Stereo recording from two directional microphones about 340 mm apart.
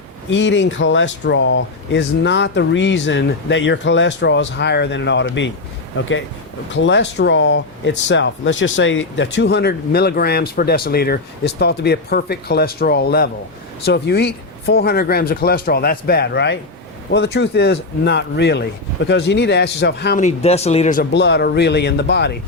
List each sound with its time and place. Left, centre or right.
0.3 s speech: left